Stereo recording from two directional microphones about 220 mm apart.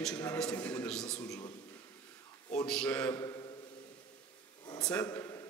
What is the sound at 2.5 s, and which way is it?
Speech, 5° left (ahead or behind).